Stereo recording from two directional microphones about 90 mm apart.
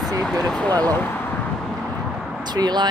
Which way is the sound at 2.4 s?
50° right (ahead or behind).